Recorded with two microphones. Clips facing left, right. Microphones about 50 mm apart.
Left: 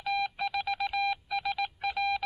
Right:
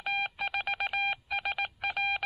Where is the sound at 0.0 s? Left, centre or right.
Right.